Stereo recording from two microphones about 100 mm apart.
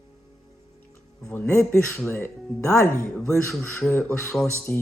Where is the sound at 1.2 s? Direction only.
25° left (ahead or behind).